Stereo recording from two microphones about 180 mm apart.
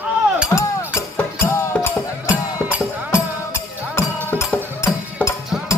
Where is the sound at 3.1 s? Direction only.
15° left (ahead or behind).